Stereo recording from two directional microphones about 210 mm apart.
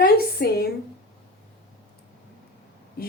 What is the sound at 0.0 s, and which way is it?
Speech, 45° left (ahead or behind).